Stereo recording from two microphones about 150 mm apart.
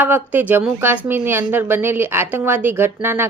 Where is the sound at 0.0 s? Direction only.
10° right (ahead or behind).